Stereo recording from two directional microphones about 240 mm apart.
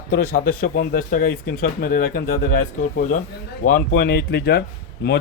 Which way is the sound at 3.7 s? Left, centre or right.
Left.